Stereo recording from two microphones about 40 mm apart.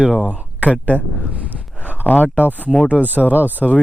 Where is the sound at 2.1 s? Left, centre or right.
Left.